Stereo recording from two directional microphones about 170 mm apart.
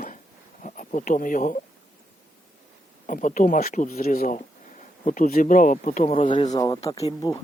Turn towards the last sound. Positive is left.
turn(degrees=20)  # may be behind; listen again after turning